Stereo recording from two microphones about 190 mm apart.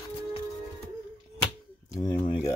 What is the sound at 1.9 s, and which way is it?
Speech, 20° left (ahead or behind).